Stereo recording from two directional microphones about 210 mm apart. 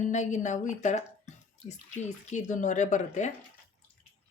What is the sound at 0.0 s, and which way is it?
Speech, 35° left (ahead or behind).